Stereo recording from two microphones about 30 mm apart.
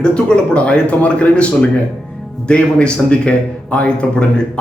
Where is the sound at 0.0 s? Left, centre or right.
Left.